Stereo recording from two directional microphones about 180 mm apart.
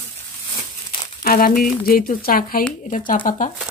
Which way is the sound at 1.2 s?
55° left (ahead or behind).